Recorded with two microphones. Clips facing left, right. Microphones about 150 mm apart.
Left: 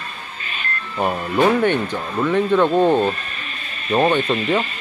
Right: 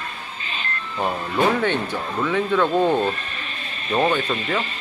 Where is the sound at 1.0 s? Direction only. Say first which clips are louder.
Left 3 dB; 15° left (ahead or behind).